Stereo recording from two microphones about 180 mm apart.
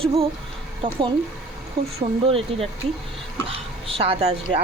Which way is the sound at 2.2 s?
30° right (ahead or behind).